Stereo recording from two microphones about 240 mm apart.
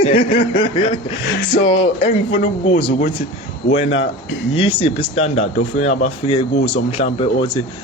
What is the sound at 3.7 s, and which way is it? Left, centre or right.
Speech, left.